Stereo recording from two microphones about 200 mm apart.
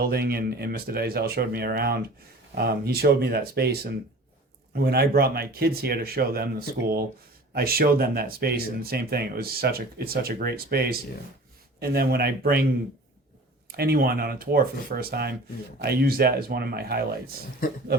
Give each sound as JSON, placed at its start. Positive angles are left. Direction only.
{"t": 0.0, "sound": "speech", "side_deg": -50}
{"t": 13.7, "sound": "speech", "side_deg": -50}